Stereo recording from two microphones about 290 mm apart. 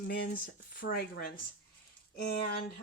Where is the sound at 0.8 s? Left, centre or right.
Left.